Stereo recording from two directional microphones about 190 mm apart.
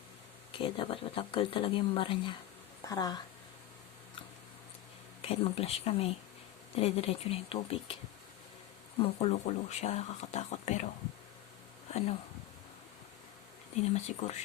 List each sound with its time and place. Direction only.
0.5 s speech: 25° left (ahead or behind)
5.2 s speech: 30° left (ahead or behind)
9.0 s speech: 30° left (ahead or behind)
13.7 s speech: 35° left (ahead or behind)